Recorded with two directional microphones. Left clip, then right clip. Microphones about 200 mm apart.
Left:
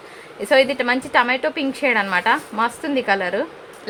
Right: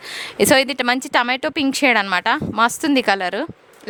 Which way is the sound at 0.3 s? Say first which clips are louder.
Right 1 dB; 60° right (ahead or behind).